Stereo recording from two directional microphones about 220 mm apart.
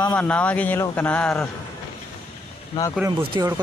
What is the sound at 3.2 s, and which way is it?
Speech, 20° right (ahead or behind).